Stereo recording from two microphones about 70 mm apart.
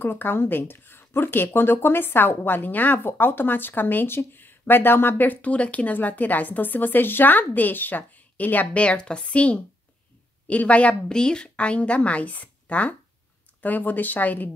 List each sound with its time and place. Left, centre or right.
0.0 s speech: left